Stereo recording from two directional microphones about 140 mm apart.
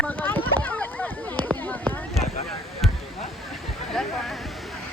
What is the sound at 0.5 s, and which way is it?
Rowboat, 15° left (ahead or behind).